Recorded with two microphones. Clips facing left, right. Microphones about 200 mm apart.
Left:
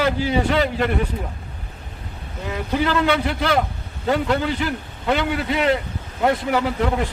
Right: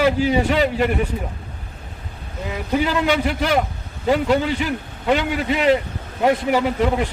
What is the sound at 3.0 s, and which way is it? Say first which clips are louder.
A man's voice: right 1 dB; 15° right (ahead or behind).